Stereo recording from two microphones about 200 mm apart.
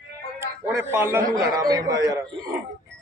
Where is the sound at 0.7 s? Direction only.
10° right (ahead or behind).